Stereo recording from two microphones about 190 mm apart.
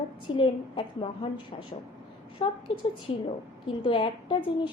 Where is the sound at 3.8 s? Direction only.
25° left (ahead or behind).